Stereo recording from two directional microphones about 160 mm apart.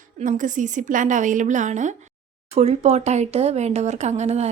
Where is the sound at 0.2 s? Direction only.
55° right (ahead or behind).